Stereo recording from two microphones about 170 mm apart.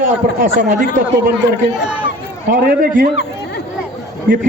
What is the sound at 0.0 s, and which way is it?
A man's voice, 55° right (ahead or behind).